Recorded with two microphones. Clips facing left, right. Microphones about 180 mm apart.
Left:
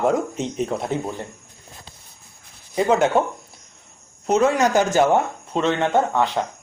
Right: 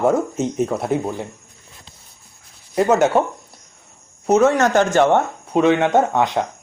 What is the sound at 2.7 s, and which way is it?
Speech, 5° right (ahead or behind).